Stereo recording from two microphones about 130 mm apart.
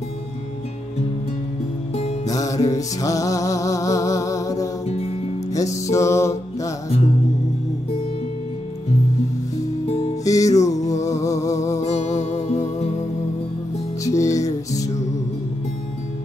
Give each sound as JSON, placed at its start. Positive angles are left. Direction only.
{"t": 2.2, "sound": "music", "side_deg": 25}
{"t": 4.8, "sound": "music", "side_deg": 55}
{"t": 5.5, "sound": "music", "side_deg": 25}
{"t": 9.8, "sound": "music", "side_deg": 50}
{"t": 10.2, "sound": "music", "side_deg": 25}
{"t": 11.8, "sound": "music", "side_deg": 60}
{"t": 14.0, "sound": "music", "side_deg": 25}